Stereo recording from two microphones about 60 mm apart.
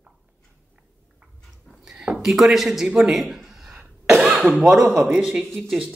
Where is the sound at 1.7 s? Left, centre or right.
Centre.